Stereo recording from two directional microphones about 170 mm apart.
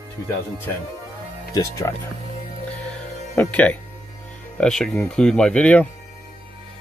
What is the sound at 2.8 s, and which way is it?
Music, 10° left (ahead or behind).